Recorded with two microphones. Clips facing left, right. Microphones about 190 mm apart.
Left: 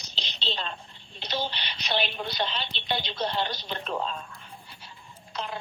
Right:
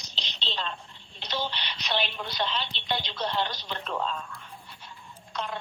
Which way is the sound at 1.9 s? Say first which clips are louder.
Left 2 dB; 30° left (ahead or behind).